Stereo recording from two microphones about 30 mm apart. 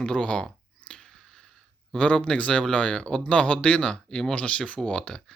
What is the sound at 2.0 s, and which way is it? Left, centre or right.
Speech, left.